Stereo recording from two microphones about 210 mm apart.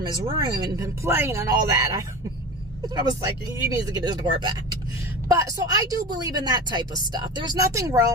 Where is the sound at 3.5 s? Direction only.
15° right (ahead or behind).